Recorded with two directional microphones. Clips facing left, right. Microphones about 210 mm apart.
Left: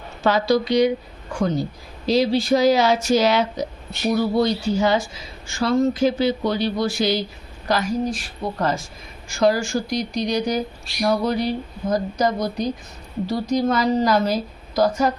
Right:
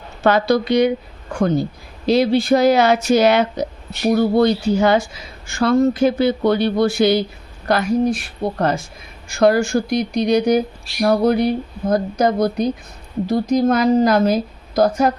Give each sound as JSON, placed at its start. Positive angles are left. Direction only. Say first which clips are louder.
{"t": 0.2, "sound": "a woman's voice", "louder": "right 3 dB", "side_deg": -60}
{"t": 9.3, "sound": "a woman's voice", "louder": "right 4 dB", "side_deg": -60}